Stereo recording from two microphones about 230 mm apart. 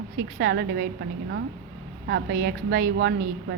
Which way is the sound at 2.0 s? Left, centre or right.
Right.